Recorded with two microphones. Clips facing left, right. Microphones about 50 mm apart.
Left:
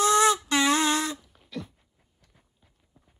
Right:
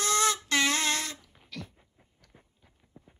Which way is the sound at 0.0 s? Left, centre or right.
Left.